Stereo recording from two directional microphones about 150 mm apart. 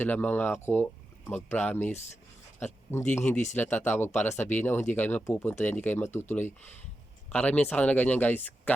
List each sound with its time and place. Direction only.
0.0 s speech: 10° left (ahead or behind)
2.6 s a sound: 15° left (ahead or behind)
3.2 s speech: 50° left (ahead or behind)
3.5 s speech: 15° left (ahead or behind)